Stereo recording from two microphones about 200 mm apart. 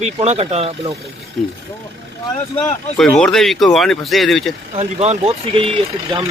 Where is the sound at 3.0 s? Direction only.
5° left (ahead or behind).